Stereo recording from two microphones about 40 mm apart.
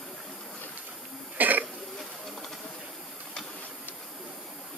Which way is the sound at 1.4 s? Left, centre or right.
Right.